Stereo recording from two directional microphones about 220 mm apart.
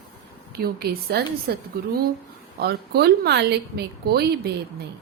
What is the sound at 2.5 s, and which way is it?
Speech, 45° right (ahead or behind).